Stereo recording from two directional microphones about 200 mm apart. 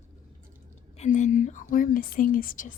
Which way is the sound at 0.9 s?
35° left (ahead or behind).